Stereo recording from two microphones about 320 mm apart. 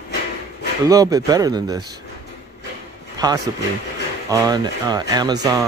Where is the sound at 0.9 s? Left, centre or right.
Centre.